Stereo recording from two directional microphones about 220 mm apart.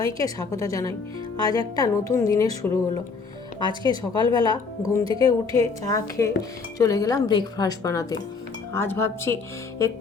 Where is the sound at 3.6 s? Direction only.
20° right (ahead or behind).